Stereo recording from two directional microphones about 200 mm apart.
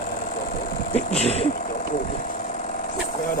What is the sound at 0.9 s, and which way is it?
Speech, 30° left (ahead or behind).